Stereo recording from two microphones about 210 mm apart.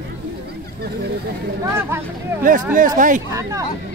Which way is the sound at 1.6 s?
10° right (ahead or behind).